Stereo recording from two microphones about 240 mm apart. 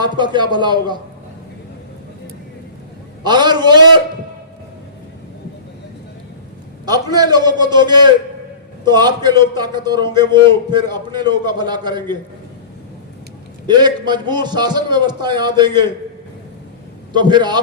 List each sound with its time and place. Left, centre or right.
0.0 s a man's voice: centre
3.2 s a man's voice: centre
6.8 s a man's voice: centre
13.7 s a man's voice: centre
17.1 s a man's voice: centre